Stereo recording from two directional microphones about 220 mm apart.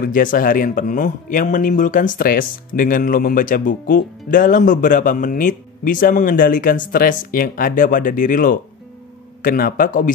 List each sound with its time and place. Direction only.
0.0 s speech: 40° left (ahead or behind)